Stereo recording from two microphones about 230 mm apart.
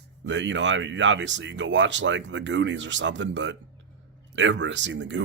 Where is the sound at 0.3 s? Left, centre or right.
Right.